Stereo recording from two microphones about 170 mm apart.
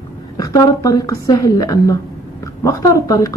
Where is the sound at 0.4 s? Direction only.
20° left (ahead or behind).